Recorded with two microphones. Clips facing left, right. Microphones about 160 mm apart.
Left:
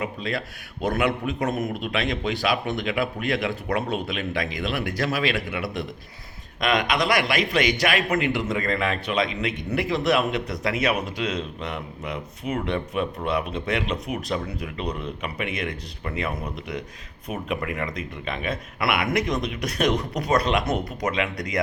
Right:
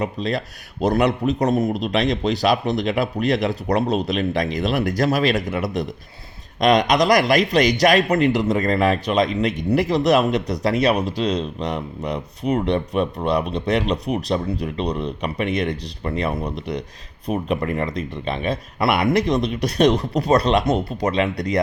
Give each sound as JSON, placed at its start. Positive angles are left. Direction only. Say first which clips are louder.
{"t": 0.0, "sound": "a man's voice", "louder": "right 5 dB", "side_deg": -40}